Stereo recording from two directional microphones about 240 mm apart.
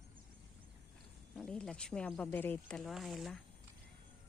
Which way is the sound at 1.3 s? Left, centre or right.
Centre.